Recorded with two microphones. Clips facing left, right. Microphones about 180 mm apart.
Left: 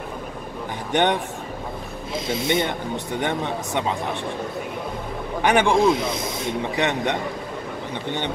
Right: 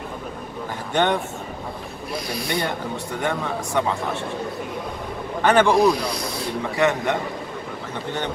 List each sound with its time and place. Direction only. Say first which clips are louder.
0.9 s speech: even; 20° left (ahead or behind)
5.4 s speech: right 2 dB; 15° left (ahead or behind)